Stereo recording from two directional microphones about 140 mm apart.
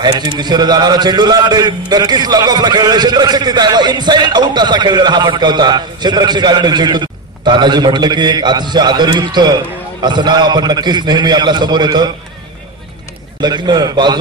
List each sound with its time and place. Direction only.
0.0 s a man's voice: 30° right (ahead or behind)
13.4 s a man's voice: 30° right (ahead or behind)